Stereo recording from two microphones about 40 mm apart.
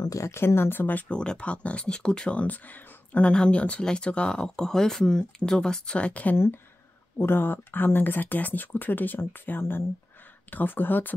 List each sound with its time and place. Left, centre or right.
0.3 s speech: left
0.7 s speech: left
1.0 s speech: left
2.3 s speech: left
3.2 s speech: left
5.9 s speech: left
6.3 s speech: left
7.2 s speech: left
10.5 s speech: left